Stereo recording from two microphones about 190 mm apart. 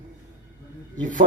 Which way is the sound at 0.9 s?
40° right (ahead or behind).